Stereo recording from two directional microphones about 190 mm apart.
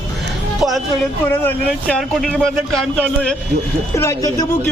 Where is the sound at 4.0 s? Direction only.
15° left (ahead or behind).